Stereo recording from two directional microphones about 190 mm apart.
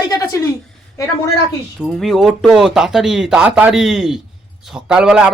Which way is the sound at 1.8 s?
Centre (ahead or behind).